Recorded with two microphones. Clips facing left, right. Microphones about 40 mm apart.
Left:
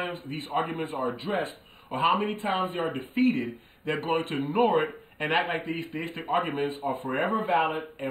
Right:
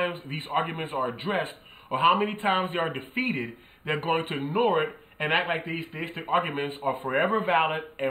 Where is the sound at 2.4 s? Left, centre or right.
Right.